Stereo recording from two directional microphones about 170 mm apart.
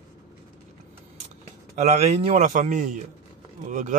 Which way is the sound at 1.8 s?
40° right (ahead or behind).